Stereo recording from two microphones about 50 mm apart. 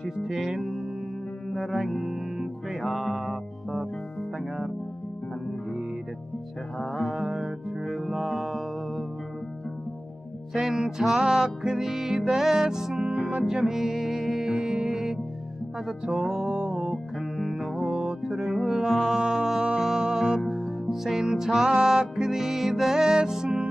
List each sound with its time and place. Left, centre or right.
0.2 s music: centre
7.2 s music: right
7.8 s music: centre
10.5 s music: centre
13.0 s music: right
13.5 s music: centre
14.5 s music: centre
16.9 s music: centre